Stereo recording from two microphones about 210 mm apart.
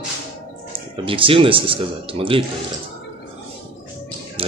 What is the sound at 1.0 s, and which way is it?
A man's voice, 25° right (ahead or behind).